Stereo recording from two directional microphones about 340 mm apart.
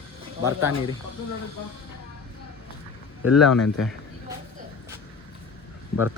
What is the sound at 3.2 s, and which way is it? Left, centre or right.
Speech, centre.